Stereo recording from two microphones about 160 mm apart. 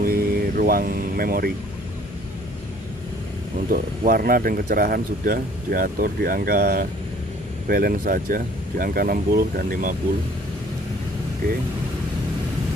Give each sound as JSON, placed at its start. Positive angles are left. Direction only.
{"t": 0.0, "sound": "vehicle", "side_deg": -70}
{"t": 3.6, "sound": "speech", "side_deg": -60}